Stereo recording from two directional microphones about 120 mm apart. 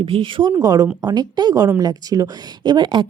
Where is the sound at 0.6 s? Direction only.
30° right (ahead or behind).